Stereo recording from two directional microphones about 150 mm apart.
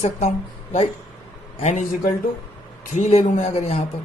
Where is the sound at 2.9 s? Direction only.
50° left (ahead or behind).